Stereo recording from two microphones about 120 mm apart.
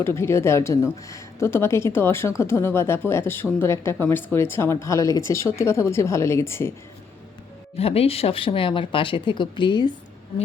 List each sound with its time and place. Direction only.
0.0 s speech: 20° left (ahead or behind)
7.8 s speech: 55° left (ahead or behind); by 9.9 s 40° left (ahead or behind)